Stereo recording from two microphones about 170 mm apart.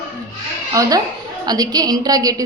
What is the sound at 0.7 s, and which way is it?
A woman's voice, 20° right (ahead or behind).